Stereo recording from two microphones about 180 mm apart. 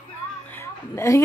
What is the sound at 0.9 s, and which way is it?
Speech, 15° left (ahead or behind).